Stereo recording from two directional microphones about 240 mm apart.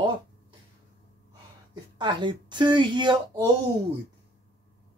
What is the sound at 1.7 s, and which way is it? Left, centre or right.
Speech, centre.